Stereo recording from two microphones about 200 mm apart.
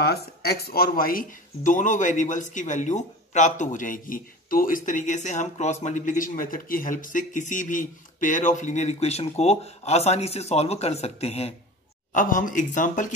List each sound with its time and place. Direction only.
0.0 s speech: 50° left (ahead or behind)